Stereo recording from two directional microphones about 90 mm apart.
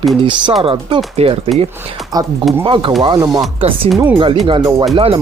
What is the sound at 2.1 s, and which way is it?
Speech, 45° right (ahead or behind).